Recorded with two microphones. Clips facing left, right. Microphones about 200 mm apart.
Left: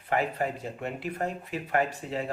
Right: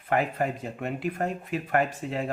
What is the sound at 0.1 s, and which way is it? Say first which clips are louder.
Speech: right 2 dB; 45° right (ahead or behind).